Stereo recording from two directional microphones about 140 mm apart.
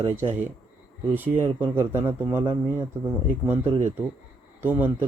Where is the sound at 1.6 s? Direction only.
15° right (ahead or behind).